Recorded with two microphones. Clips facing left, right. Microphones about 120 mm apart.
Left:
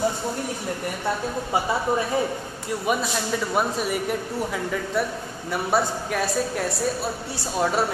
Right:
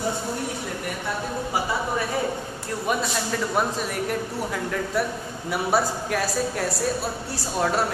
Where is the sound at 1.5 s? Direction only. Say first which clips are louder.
Left 3 dB; 25° left (ahead or behind).